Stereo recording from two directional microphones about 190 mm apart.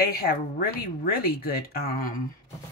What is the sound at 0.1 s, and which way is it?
Speech, 55° left (ahead or behind).